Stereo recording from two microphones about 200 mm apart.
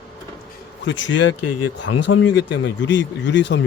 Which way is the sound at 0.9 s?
65° left (ahead or behind).